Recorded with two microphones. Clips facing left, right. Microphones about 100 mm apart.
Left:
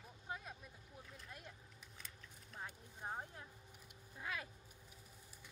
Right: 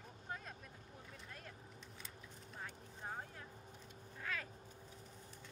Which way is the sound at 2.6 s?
15° left (ahead or behind).